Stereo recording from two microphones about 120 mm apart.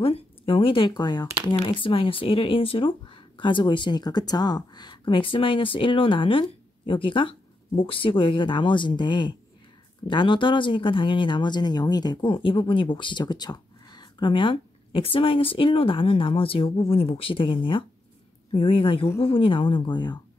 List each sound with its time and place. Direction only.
0.0 s speech: 50° left (ahead or behind)
1.6 s speech: 45° left (ahead or behind)